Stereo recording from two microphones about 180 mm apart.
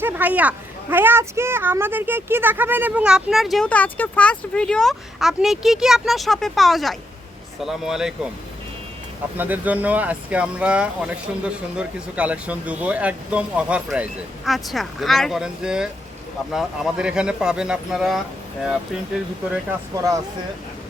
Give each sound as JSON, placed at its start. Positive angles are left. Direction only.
{"t": 0.0, "sound": "speech", "side_deg": -10}
{"t": 9.4, "sound": "speech", "side_deg": -10}